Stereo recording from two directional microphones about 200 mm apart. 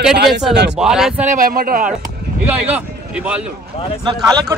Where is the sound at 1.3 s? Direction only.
45° right (ahead or behind).